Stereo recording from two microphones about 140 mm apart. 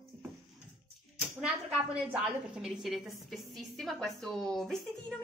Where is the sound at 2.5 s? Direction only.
5° right (ahead or behind).